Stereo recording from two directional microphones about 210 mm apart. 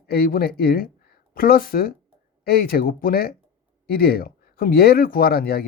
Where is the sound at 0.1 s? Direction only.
45° left (ahead or behind).